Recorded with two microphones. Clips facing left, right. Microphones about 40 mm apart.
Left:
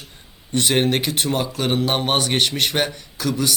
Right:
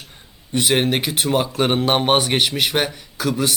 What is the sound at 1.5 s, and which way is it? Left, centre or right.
Speech, right.